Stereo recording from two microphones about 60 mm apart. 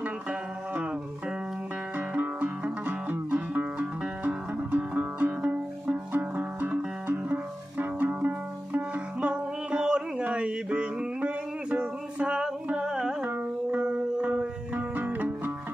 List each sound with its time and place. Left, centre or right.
0.0 s music: right
2.0 s music: right; by 13.1 s centre
13.2 s music: right